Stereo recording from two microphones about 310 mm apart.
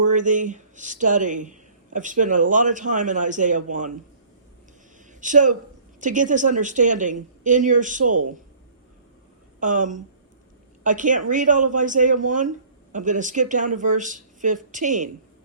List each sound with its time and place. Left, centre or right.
0.0 s speech: right
5.2 s speech: right
9.6 s speech: right